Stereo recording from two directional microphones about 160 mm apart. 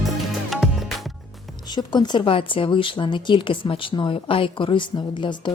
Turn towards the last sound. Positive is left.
turn(degrees=30)  # may be behind; listen again after turning